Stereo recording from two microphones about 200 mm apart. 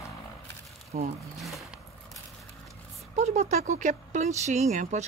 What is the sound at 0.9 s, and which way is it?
Speech, 40° right (ahead or behind).